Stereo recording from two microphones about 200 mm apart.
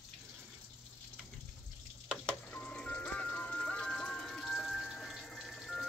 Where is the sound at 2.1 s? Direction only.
5° left (ahead or behind).